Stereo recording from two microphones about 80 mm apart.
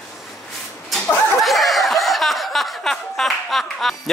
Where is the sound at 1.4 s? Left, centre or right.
Centre.